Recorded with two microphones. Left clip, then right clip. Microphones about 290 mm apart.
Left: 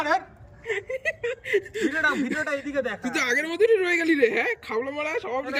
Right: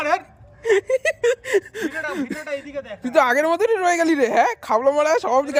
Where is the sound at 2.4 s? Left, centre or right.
Left.